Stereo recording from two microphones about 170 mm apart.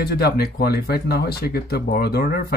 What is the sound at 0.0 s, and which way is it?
Speech, 70° left (ahead or behind).